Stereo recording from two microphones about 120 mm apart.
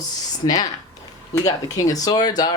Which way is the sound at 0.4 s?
30° left (ahead or behind).